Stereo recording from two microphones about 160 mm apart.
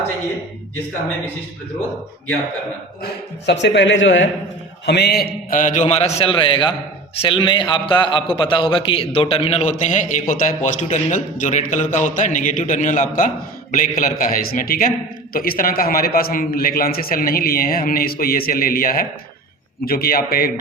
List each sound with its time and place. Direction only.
3.0 s speech: 90° left
4.9 s a man's voice: 90° left; by 20.5 s 70° left (ahead or behind)